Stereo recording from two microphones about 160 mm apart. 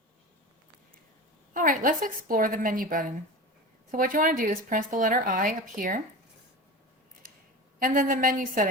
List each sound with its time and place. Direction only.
1.5 s speech: 55° right (ahead or behind)
7.8 s speech: 55° right (ahead or behind)